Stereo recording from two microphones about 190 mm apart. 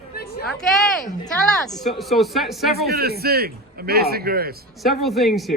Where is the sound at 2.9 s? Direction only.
55° right (ahead or behind).